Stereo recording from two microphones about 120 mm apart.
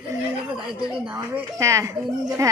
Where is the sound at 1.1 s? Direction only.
25° right (ahead or behind).